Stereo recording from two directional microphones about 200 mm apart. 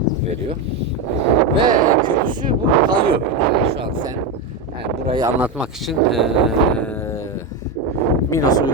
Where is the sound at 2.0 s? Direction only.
25° right (ahead or behind).